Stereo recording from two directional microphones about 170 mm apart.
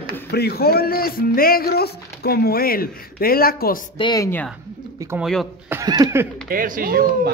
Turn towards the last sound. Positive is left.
turn(degrees=-60)  # may be behind; listen again after turning